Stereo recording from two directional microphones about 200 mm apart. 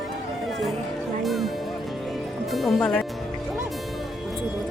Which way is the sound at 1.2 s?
Centre (ahead or behind).